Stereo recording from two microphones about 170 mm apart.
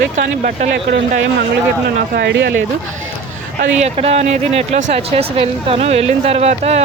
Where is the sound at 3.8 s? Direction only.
40° right (ahead or behind).